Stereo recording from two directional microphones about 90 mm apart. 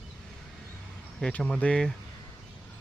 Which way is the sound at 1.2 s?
15° left (ahead or behind).